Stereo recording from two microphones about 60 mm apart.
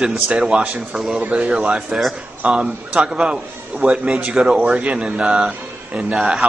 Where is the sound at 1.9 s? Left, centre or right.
Centre.